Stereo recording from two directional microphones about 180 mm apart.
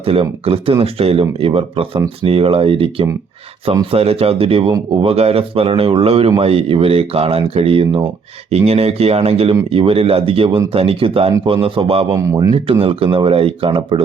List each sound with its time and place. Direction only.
0.0 s speech: 30° right (ahead or behind)
12.1 s speech: 20° right (ahead or behind)
12.8 s speech: 30° right (ahead or behind)